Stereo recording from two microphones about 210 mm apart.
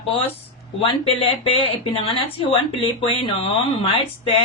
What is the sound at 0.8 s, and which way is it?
Speech, 25° left (ahead or behind).